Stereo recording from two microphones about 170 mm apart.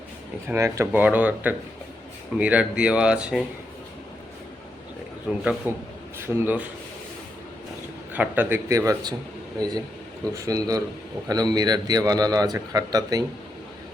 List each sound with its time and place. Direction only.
0.4 s speech: 15° right (ahead or behind)
5.3 s a man's voice: 5° right (ahead or behind)
8.1 s a man's voice: 10° right (ahead or behind)